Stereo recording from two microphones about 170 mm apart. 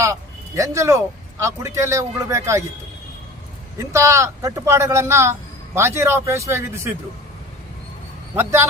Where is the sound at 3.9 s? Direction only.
15° right (ahead or behind).